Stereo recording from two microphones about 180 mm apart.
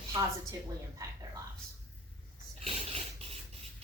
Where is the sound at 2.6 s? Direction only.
35° right (ahead or behind).